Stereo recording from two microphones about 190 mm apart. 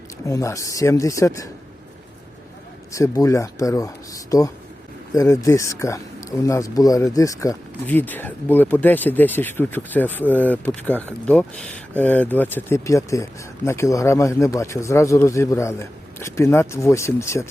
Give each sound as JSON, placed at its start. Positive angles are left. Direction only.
{"t": 0.3, "sound": "speech", "side_deg": 15}
{"t": 2.9, "sound": "speech", "side_deg": 15}